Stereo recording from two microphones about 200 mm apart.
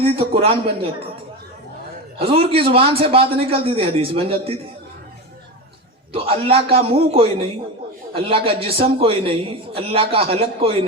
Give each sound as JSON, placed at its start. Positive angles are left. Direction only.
{"t": 0.0, "sound": "a man's voice", "side_deg": -30}
{"t": 2.1, "sound": "a man's voice", "side_deg": -30}
{"t": 6.1, "sound": "a man's voice", "side_deg": -30}